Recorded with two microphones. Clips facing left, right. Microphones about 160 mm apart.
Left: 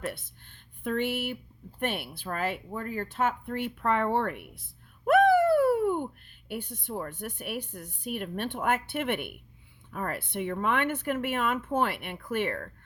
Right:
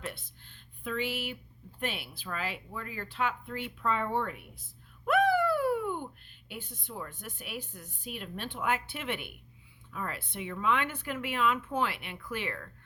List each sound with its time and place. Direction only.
0.0 s speech: 55° left (ahead or behind)
5.0 s a sound: 50° left (ahead or behind)
6.5 s speech: 55° left (ahead or behind)